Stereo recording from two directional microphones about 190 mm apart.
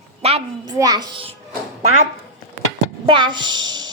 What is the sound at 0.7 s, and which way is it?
Speech, 20° right (ahead or behind).